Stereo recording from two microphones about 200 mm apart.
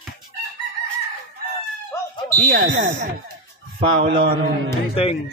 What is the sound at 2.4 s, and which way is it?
A man's voice, 40° right (ahead or behind).